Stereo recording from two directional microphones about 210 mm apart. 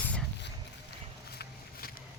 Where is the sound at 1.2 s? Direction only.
45° left (ahead or behind).